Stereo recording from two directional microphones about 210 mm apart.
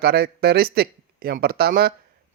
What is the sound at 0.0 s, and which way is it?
Speech, 45° right (ahead or behind).